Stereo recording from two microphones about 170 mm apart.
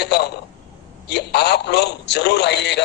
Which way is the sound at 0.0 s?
70° left (ahead or behind).